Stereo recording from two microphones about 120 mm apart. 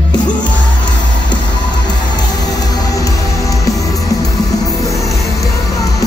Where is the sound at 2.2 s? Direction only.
35° left (ahead or behind).